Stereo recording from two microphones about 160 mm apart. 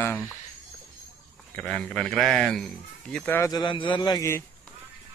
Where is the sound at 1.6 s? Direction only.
5° left (ahead or behind).